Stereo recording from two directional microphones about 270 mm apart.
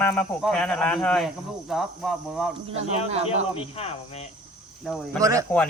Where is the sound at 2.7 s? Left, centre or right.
Right.